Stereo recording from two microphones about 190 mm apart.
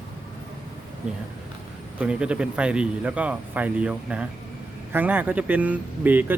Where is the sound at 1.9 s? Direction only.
5° right (ahead or behind).